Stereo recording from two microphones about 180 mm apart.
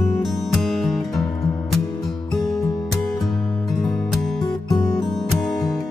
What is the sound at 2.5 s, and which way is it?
Music, 20° left (ahead or behind).